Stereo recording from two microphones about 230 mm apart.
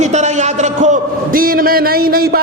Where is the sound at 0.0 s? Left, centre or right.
Right.